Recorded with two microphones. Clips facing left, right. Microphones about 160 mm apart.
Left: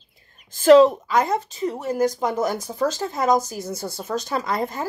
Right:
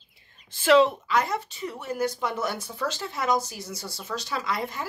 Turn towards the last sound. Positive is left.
turn(degrees=45)  # may be behind; listen again after turning